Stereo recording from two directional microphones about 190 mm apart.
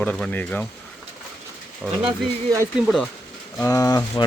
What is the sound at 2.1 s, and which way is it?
Speech, 20° right (ahead or behind).